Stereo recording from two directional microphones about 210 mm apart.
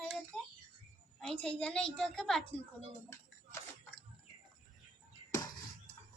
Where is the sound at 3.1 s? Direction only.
15° left (ahead or behind).